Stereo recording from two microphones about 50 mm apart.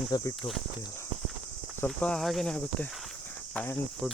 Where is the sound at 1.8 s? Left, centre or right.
Left.